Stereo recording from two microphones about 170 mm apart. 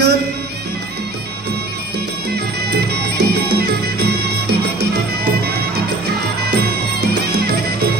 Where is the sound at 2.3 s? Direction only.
70° right (ahead or behind).